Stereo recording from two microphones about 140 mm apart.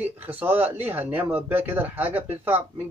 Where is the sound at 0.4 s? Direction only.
15° right (ahead or behind).